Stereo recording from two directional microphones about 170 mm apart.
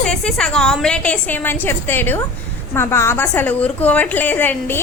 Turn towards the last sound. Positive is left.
turn(degrees=10)  # may be behind; listen again after turning